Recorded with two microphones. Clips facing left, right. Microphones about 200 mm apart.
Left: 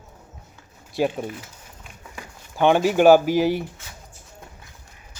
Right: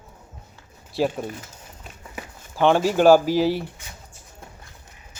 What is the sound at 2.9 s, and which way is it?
Speech, 5° left (ahead or behind).